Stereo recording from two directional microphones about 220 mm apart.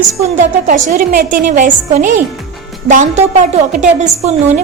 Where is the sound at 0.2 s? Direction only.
30° right (ahead or behind).